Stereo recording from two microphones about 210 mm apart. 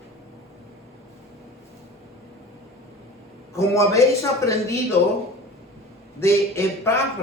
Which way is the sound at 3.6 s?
15° left (ahead or behind).